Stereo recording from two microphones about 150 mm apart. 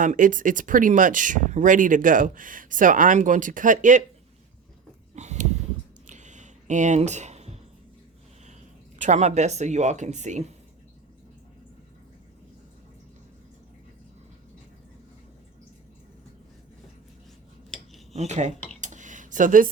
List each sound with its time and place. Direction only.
0.0 s speech: 60° right (ahead or behind)
5.1 s a sound: 50° right (ahead or behind)
9.0 s speech: 50° right (ahead or behind)
17.7 s dishes: 5° left (ahead or behind)
18.1 s speech: 50° right (ahead or behind)
18.8 s a sound: 55° right (ahead or behind)